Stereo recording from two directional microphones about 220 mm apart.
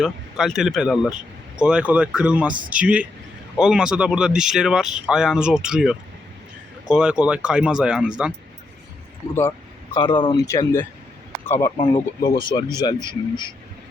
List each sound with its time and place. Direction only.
0.0 s speech: centre (ahead or behind)
9.9 s speech: 20° left (ahead or behind)